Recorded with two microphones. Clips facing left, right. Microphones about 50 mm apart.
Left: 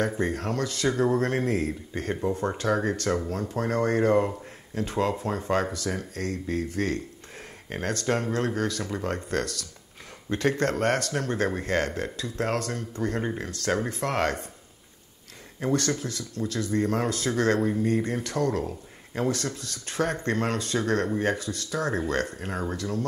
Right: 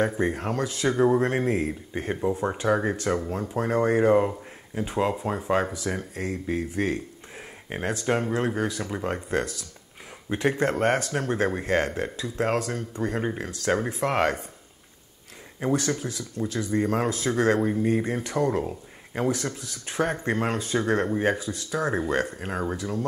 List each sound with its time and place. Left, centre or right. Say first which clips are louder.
0.2 s speech: right 1 dB; centre
15.6 s speech: right 1 dB; centre